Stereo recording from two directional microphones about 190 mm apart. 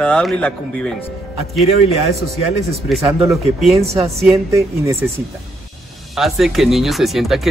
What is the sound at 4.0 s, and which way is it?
Speech, 15° right (ahead or behind).